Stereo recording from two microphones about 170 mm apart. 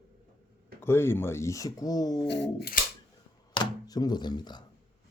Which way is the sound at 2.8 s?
55° left (ahead or behind).